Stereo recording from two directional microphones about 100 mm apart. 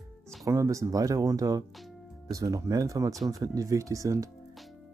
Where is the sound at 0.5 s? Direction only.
30° right (ahead or behind).